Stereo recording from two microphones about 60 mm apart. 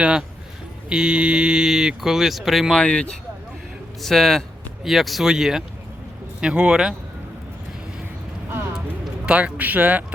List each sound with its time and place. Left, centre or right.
0.0 s speech: centre
2.8 s speech: centre
4.0 s speech: centre
9.2 s speech: centre